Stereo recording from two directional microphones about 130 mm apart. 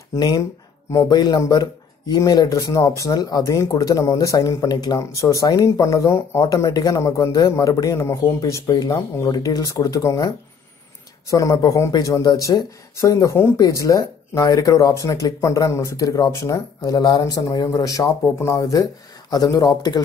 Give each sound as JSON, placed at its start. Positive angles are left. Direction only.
{"t": 0.1, "sound": "speech", "side_deg": 25}